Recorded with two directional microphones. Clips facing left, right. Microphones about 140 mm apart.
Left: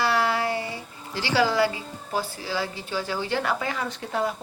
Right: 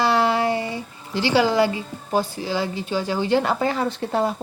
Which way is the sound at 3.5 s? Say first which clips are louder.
Right 7 dB; 35° right (ahead or behind).